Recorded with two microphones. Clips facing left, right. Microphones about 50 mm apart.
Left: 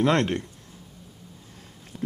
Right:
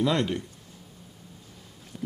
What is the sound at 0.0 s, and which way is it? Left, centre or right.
Speech, left.